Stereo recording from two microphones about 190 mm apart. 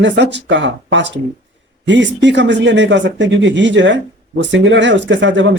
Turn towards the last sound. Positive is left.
turn(degrees=-70)  # may be behind; listen again after turning